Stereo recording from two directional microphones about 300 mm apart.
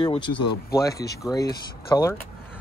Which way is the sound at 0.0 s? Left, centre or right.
Centre.